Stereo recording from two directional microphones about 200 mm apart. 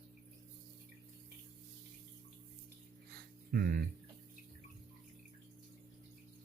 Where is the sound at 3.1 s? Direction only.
50° right (ahead or behind).